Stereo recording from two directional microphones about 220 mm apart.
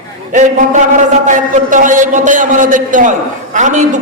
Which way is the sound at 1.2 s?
35° right (ahead or behind).